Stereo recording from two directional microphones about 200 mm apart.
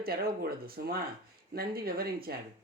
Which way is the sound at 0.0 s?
50° right (ahead or behind).